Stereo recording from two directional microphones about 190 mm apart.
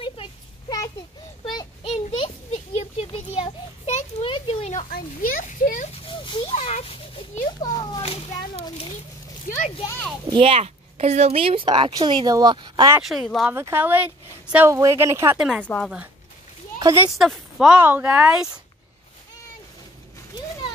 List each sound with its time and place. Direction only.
0.0 s a sound: 25° left (ahead or behind)
3.3 s children playing: 30° left (ahead or behind)
4.9 s a sound: 45° left (ahead or behind)
6.0 s children playing: 25° left (ahead or behind)
10.3 s a woman's voice: 30° right (ahead or behind)
13.1 s speech: centre (ahead or behind)
13.6 s speech: 10° right (ahead or behind)
15.3 s speech: centre (ahead or behind)
16.8 s speech: 15° right (ahead or behind)
17.2 s speech: centre (ahead or behind)